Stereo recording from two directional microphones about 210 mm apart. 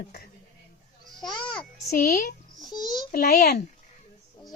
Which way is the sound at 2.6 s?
20° left (ahead or behind).